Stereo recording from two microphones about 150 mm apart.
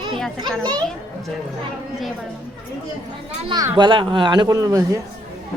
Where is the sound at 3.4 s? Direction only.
25° right (ahead or behind).